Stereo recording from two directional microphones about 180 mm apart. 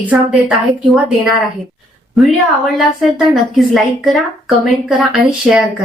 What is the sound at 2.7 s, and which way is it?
A woman's voice, centre (ahead or behind).